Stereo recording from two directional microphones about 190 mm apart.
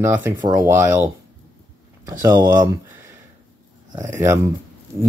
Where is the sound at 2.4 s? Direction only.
20° right (ahead or behind).